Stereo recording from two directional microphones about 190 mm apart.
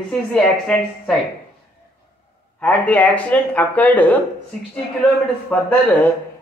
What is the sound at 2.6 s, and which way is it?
A woman's voice, 5° left (ahead or behind).